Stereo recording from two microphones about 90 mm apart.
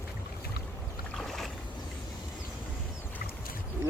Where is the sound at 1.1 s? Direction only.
5° left (ahead or behind).